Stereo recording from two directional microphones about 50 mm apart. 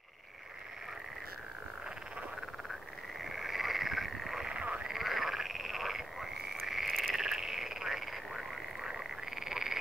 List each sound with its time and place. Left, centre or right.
3.3 s frog: centre
4.5 s frog: right
4.8 s frog: centre
7.2 s frog: centre